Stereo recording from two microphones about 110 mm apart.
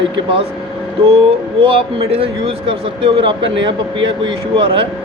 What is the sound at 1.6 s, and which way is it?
Speech, 55° right (ahead or behind).